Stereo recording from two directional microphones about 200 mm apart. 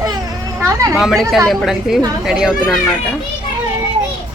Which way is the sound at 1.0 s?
Centre (ahead or behind).